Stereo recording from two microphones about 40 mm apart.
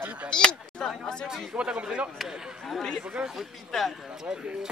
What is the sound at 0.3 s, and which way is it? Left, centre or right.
Speech, left.